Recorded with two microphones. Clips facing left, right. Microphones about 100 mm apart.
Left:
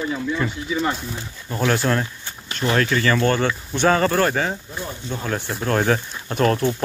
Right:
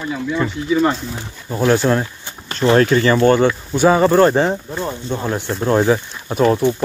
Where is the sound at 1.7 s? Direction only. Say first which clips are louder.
Right 6 dB; 20° right (ahead or behind).